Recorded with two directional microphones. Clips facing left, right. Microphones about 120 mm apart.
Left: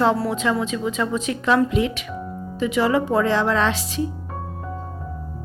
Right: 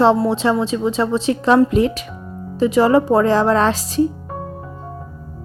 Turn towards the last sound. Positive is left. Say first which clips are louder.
# right 5 dB
turn(degrees=-40)  # may be behind; listen again after turning